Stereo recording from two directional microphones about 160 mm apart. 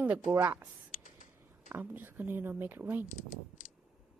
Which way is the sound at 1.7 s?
10° right (ahead or behind).